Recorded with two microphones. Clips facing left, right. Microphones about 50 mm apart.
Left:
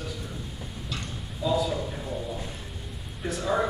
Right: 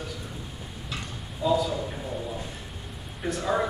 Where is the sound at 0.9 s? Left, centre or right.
Centre.